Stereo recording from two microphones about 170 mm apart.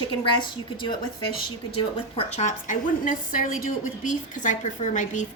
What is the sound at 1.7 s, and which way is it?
A woman's voice, 40° left (ahead or behind).